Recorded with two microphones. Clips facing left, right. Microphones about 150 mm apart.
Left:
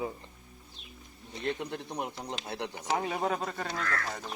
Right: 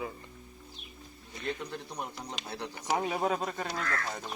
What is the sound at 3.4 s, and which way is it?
Speech, 15° right (ahead or behind).